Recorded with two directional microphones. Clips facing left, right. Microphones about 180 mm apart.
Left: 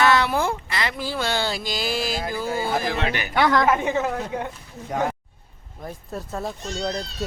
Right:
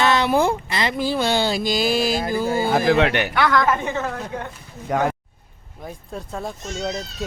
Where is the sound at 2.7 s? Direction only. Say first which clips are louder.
Right 7 dB; 85° right; by 3.3 s 70° right (ahead or behind).